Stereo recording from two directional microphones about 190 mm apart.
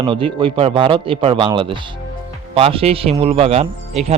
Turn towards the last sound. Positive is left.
turn(degrees=-35)  # may be behind; listen again after turning